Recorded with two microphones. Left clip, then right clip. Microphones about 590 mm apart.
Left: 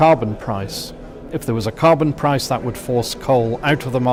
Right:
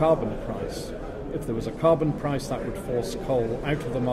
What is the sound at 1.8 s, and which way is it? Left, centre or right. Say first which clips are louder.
Speech: left 7 dB; left.